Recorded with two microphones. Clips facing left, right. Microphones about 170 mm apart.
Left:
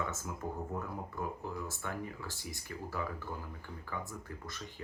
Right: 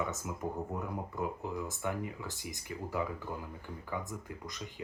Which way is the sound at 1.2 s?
15° right (ahead or behind).